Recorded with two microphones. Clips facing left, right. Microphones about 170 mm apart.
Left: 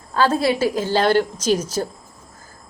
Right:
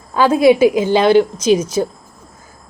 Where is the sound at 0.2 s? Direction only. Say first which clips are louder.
Right 8 dB; 15° right (ahead or behind).